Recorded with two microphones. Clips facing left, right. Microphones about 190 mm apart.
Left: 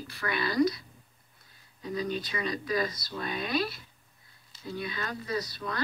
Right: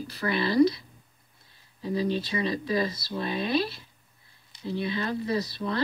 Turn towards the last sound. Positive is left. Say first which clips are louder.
# right 5 dB
turn(degrees=-30)  # may be behind; listen again after turning